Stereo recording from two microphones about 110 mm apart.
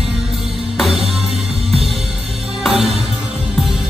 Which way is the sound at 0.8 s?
5° right (ahead or behind).